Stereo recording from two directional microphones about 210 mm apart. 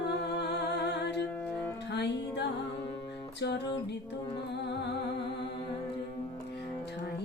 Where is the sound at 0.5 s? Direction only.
50° left (ahead or behind).